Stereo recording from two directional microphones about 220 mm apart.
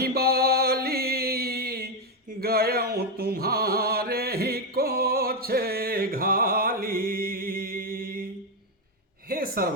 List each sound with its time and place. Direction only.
0.0 s music: 45° right (ahead or behind)
2.4 s mantra: 45° right (ahead or behind)
9.3 s a sound: 40° right (ahead or behind)